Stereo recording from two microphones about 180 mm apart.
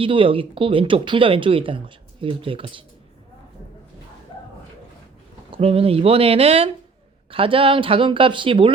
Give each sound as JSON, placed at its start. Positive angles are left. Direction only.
{"t": 0.0, "sound": "speech", "side_deg": -30}
{"t": 5.5, "sound": "speech", "side_deg": -30}